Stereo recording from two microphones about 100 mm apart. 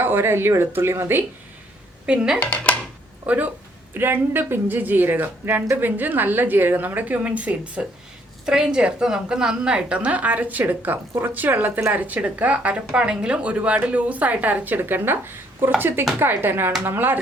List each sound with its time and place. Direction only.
0.0 s speech: 20° right (ahead or behind)
2.0 s a woman's voice: 10° right (ahead or behind)
2.4 s speech: 15° left (ahead or behind)
3.2 s a woman's voice: 15° right (ahead or behind)